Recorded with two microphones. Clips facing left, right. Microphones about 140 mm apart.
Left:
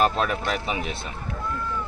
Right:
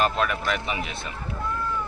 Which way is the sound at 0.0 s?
35° left (ahead or behind).